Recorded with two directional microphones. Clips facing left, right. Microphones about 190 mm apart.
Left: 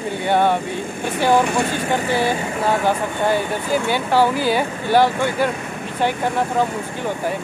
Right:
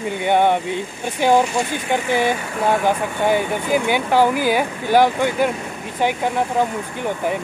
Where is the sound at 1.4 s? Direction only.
55° left (ahead or behind).